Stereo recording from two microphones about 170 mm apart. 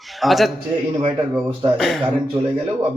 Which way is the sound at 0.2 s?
Centre (ahead or behind).